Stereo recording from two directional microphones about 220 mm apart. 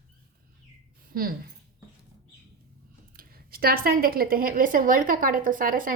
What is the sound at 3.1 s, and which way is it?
A woman's voice, 40° right (ahead or behind).